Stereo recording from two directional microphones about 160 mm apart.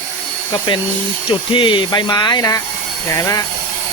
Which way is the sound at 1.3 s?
30° left (ahead or behind).